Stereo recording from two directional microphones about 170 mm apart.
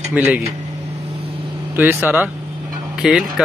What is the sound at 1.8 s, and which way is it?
Speech, 10° right (ahead or behind).